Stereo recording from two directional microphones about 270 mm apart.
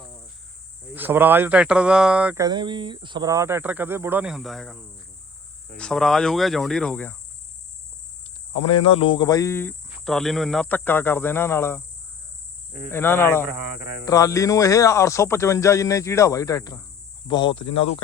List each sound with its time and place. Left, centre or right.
0.9 s speech: centre
8.8 s speech: centre
12.9 s speech: centre